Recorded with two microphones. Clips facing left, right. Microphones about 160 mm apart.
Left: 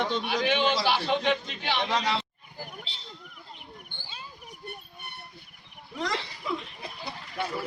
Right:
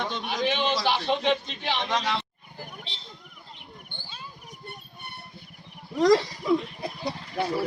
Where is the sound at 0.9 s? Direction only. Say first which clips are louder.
Right 1 dB; 20° right (ahead or behind).